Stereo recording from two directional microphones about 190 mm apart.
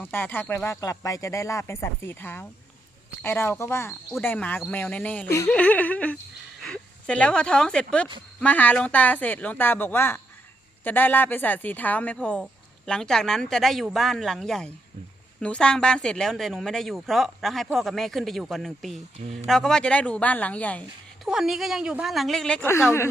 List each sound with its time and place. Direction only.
0.0 s speech: 10° left (ahead or behind)
19.2 s speech: 35° right (ahead or behind)
19.5 s speech: 5° left (ahead or behind)